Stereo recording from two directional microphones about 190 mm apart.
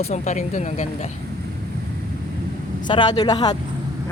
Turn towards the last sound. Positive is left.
turn(degrees=20)  # may be behind; listen again after turning